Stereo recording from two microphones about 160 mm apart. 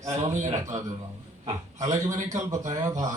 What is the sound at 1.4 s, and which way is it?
A man's voice, 20° right (ahead or behind).